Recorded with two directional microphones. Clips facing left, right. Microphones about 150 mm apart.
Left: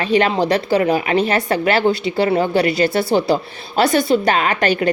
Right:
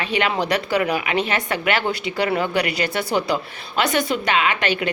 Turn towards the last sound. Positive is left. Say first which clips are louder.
# left 5 dB
turn(degrees=40)  # may be behind; listen again after turning